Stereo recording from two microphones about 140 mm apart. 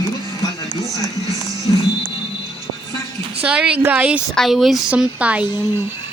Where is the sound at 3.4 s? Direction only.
10° right (ahead or behind).